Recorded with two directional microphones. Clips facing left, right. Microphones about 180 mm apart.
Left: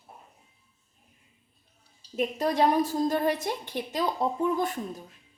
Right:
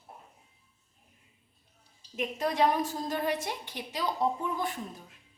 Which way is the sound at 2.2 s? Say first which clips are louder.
Left 3 dB; 40° left (ahead or behind).